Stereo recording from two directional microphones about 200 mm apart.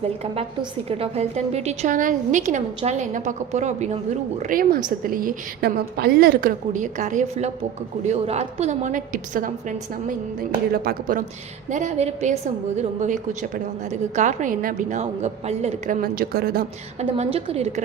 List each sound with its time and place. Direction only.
0.0 s a woman's voice: 30° right (ahead or behind); by 16.6 s 50° right (ahead or behind)
17.0 s a woman's voice: 35° right (ahead or behind)